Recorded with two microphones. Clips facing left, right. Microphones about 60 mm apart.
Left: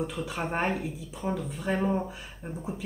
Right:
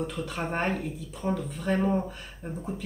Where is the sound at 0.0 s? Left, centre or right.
Centre.